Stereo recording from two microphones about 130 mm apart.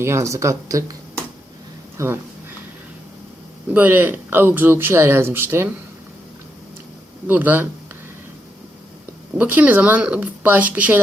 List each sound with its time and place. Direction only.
0.0 s speech: 20° right (ahead or behind)
2.0 s speech: 25° right (ahead or behind)
3.7 s speech: 15° right (ahead or behind)
7.3 s speech: 15° right (ahead or behind)
9.4 s speech: 15° right (ahead or behind)